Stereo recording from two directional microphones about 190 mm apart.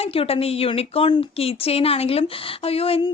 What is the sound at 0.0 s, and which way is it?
Speech, 30° left (ahead or behind).